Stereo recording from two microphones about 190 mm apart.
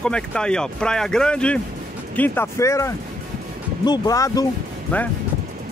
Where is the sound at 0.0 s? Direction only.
5° left (ahead or behind).